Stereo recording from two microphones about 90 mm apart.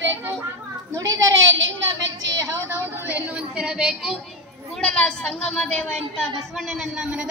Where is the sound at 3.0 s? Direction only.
15° right (ahead or behind).